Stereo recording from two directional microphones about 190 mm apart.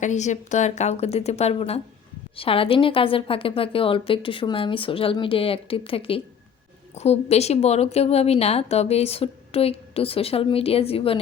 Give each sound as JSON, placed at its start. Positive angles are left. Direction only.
{"t": 0.0, "sound": "a woman's voice", "side_deg": 40}